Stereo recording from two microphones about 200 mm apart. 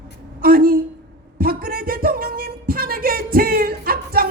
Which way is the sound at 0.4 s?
45° right (ahead or behind).